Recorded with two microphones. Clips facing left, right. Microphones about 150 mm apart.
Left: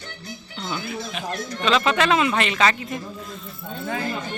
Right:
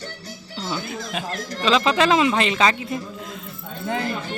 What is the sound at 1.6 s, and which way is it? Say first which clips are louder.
Speech: right 2 dB; 30° right (ahead or behind).